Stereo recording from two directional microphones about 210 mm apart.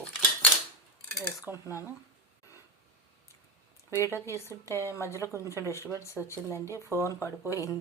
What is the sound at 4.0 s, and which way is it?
Speech, 10° left (ahead or behind).